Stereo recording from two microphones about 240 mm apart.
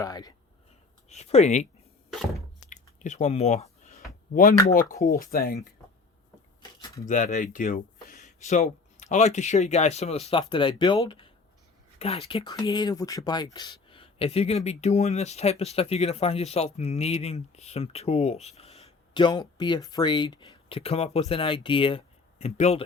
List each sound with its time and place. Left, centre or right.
0.0 s speech: centre
1.1 s speech: left
2.6 s chewing: left
4.7 s speech: left
4.9 s speech: centre
5.2 s speech: left
6.6 s a sound: centre
7.1 s speech: left